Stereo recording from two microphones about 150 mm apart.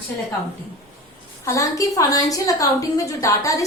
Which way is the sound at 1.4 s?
20° left (ahead or behind).